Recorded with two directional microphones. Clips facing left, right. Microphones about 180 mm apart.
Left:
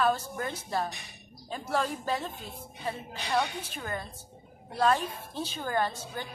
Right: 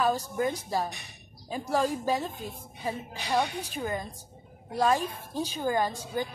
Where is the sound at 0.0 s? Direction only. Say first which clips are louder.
Right 2 dB; 15° right (ahead or behind).